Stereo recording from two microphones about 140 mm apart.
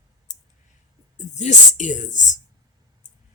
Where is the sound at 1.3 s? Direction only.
60° left (ahead or behind).